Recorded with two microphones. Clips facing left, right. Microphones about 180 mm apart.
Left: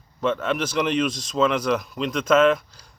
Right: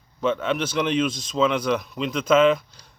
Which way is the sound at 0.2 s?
Centre (ahead or behind).